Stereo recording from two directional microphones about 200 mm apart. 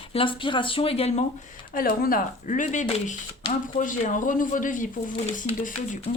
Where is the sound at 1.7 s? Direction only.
45° left (ahead or behind).